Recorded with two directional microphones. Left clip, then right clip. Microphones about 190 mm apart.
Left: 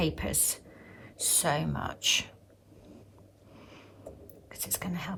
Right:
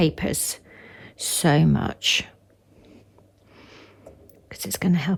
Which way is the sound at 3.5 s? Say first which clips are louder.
Right 5 dB; 50° right (ahead or behind).